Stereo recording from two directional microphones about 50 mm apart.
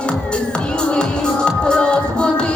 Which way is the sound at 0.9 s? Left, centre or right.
Centre.